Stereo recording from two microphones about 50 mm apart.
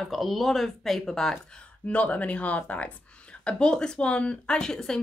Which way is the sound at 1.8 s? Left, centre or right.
Left.